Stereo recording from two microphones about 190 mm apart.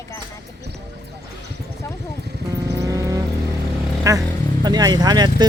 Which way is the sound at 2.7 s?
15° right (ahead or behind).